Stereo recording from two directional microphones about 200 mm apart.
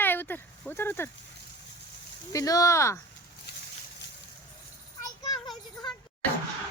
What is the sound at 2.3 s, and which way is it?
Speech, 15° left (ahead or behind).